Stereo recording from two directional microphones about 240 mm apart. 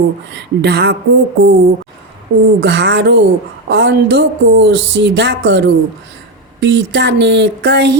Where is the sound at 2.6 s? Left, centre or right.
Right.